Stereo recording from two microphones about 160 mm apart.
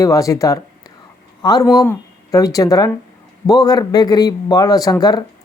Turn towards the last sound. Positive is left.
turn(degrees=25)  # may be behind; listen again after turning